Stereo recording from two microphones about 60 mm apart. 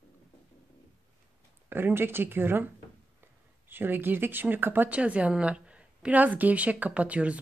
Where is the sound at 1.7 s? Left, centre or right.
Right.